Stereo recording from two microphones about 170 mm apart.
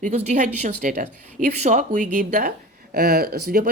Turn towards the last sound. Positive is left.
turn(degrees=-60)  # may be behind; listen again after turning